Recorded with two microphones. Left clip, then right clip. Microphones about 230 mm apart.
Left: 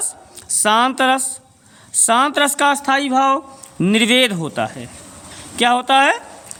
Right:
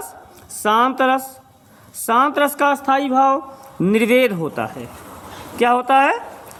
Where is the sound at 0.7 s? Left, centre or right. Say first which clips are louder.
Left 1 dB; left.